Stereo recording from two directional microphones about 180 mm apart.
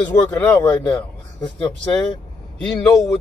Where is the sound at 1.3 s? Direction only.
25° left (ahead or behind).